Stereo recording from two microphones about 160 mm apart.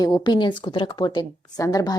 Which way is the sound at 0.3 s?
30° left (ahead or behind).